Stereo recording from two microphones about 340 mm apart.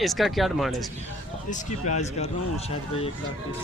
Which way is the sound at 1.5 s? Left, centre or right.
Centre.